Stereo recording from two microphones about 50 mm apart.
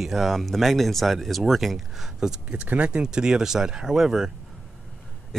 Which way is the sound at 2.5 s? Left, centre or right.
Right.